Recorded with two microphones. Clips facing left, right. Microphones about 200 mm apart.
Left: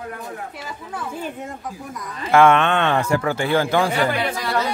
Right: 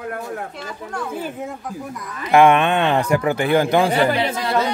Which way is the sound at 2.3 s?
15° right (ahead or behind).